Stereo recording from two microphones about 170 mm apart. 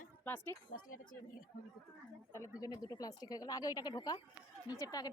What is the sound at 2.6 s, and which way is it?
A woman's voice, 20° left (ahead or behind).